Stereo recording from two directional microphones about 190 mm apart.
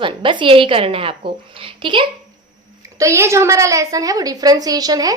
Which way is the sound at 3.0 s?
15° right (ahead or behind).